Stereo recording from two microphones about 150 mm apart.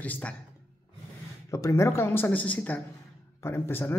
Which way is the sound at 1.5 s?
20° left (ahead or behind).